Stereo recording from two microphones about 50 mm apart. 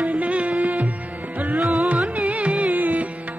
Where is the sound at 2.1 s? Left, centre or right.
Right.